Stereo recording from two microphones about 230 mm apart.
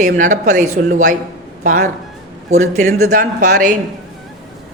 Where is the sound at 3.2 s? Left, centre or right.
Right.